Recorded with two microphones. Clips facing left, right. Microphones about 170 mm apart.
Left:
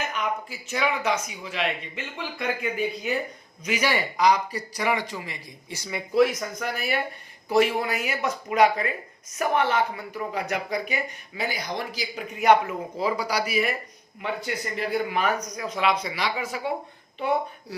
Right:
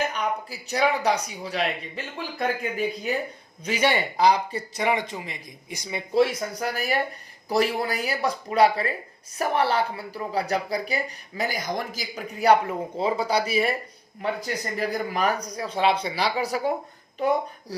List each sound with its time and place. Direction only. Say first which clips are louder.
0.1 s speech: right 1 dB; 35° right (ahead or behind); by 6.0 s 20° right (ahead or behind)
6.1 s speech: even; 30° right (ahead or behind)